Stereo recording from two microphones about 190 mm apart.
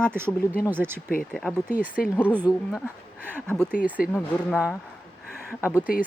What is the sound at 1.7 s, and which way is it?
Speech, 10° right (ahead or behind).